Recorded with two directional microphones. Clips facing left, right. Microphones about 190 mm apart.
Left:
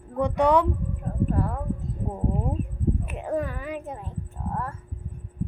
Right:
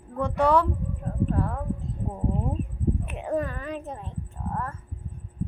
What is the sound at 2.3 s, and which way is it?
A woman's voice, 5° left (ahead or behind).